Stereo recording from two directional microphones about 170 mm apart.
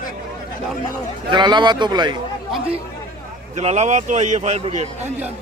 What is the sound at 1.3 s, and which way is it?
Speech, 25° right (ahead or behind).